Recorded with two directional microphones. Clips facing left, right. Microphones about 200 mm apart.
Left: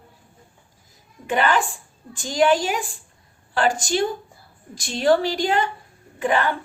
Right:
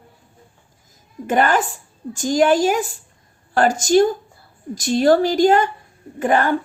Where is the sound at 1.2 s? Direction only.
45° right (ahead or behind).